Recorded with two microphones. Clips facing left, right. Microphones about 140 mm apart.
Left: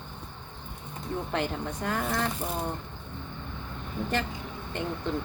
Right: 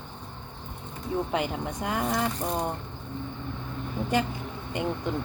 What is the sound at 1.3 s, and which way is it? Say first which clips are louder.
Speech: right 2 dB; 10° right (ahead or behind).